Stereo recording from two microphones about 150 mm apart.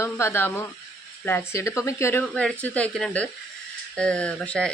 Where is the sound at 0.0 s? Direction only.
15° left (ahead or behind).